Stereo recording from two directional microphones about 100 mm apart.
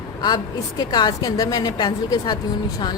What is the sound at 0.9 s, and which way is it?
Speech, 45° left (ahead or behind).